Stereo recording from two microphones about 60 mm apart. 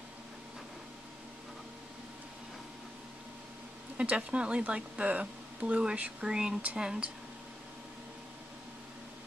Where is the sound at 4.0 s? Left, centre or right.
Right.